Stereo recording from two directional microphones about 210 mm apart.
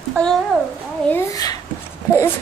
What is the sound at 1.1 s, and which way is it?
Speech, 15° left (ahead or behind).